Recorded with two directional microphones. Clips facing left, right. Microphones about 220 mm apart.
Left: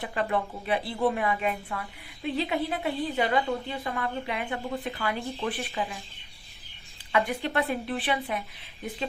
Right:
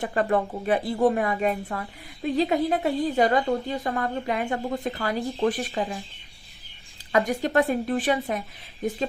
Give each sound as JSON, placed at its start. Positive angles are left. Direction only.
{"t": 0.0, "sound": "a woman's voice", "side_deg": -45}
{"t": 7.1, "sound": "a woman's voice", "side_deg": -45}